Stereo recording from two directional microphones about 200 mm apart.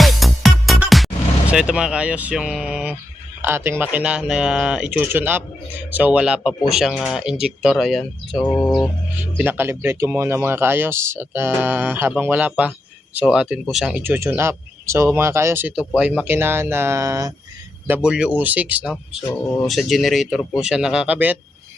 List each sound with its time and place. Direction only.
0.0 s music: centre (ahead or behind)
3.4 s speech: 10° right (ahead or behind)
8.4 s speech: 10° left (ahead or behind)
9.4 s speech: 10° right (ahead or behind)